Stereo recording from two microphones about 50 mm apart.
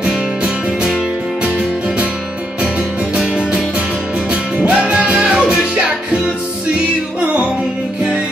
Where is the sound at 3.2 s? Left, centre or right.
Centre.